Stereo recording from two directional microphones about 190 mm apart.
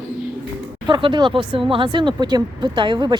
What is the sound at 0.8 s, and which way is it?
Speech, 25° right (ahead or behind).